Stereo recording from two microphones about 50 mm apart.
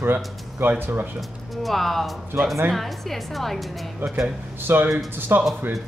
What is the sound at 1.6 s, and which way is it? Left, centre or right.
A woman's voice, centre.